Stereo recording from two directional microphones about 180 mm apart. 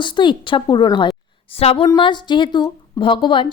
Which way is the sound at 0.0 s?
25° left (ahead or behind).